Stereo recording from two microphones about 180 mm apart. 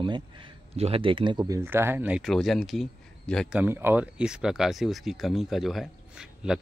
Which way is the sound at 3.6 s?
10° right (ahead or behind).